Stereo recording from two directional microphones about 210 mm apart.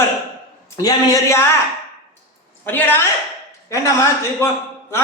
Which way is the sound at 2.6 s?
10° left (ahead or behind).